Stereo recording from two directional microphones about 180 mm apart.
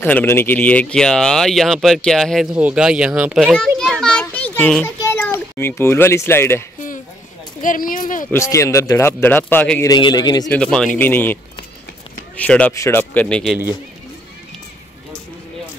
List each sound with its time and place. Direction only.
0.0 s speech: 10° left (ahead or behind); by 3.5 s 5° right (ahead or behind)
3.5 s children playing: 5° left (ahead or behind)
4.8 s a child's voice: 15° left (ahead or behind)
7.6 s speech: 50° left (ahead or behind)
8.3 s speech: 15° left (ahead or behind)
9.8 s a man's voice: 25° left (ahead or behind)
10.5 s speech: 5° left (ahead or behind)
12.4 s speech: 5° left (ahead or behind)